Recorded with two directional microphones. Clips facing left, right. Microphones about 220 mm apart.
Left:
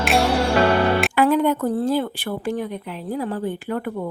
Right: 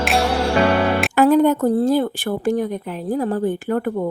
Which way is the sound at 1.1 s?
45° right (ahead or behind).